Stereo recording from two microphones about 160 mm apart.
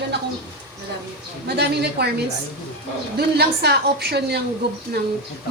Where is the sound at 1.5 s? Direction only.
90° right.